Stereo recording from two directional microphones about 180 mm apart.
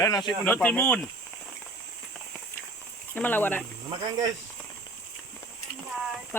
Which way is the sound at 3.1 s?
10° left (ahead or behind).